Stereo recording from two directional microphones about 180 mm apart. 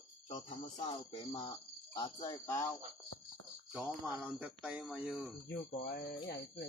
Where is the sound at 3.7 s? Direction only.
5° right (ahead or behind).